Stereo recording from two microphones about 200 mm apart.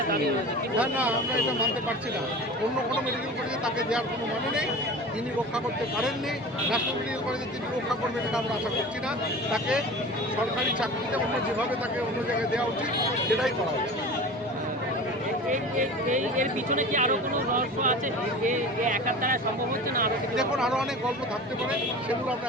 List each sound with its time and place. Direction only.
0.8 s speech: 5° right (ahead or behind)
9.5 s speech: 5° right (ahead or behind)
15.4 s speech: 40° right (ahead or behind)
20.3 s speech: 5° right (ahead or behind)